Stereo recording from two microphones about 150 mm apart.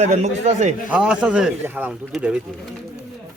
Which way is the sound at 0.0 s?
45° right (ahead or behind).